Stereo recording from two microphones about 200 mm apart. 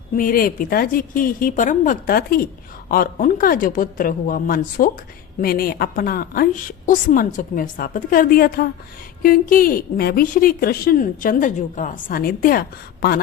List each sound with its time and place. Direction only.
0.2 s a woman's voice: 45° left (ahead or behind)